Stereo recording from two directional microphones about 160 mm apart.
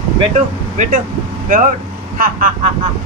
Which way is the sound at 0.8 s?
50° right (ahead or behind).